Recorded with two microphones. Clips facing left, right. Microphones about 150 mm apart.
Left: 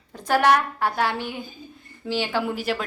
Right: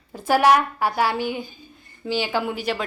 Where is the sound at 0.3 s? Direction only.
10° right (ahead or behind).